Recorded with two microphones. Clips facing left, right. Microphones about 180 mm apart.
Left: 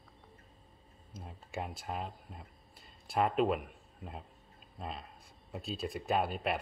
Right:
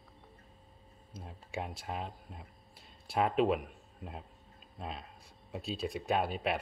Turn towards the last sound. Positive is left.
turn(degrees=0)  # may be behind; listen again after turning